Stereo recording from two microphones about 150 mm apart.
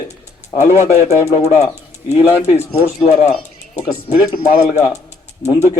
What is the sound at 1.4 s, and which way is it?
Speech, 45° left (ahead or behind).